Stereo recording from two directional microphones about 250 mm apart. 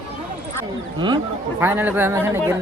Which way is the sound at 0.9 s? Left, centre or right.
Centre.